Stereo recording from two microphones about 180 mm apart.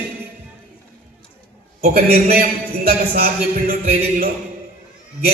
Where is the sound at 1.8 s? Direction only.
55° right (ahead or behind).